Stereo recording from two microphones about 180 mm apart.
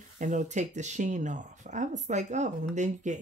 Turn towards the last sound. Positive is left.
turn(degrees=-40)  # may be behind; listen again after turning